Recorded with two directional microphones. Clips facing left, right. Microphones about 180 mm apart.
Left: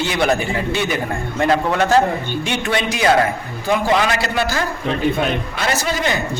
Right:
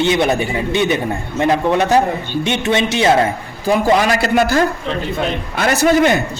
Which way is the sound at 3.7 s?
40° right (ahead or behind).